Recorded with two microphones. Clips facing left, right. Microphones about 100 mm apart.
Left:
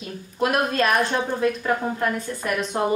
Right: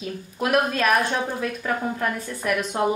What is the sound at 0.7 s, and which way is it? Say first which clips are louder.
Speech: left 1 dB; 5° right (ahead or behind).